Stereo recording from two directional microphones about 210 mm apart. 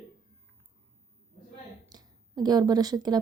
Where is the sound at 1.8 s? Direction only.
20° right (ahead or behind).